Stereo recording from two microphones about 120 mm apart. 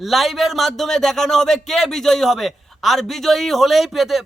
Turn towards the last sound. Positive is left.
turn(degrees=0)  # may be behind; listen again after turning